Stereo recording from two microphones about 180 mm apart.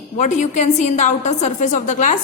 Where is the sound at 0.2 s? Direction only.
40° left (ahead or behind).